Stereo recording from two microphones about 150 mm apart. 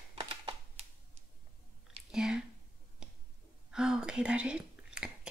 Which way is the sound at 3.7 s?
5° right (ahead or behind).